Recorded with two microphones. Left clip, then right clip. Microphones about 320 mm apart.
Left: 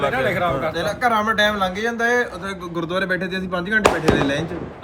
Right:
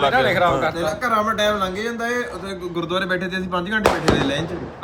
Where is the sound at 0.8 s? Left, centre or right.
Left.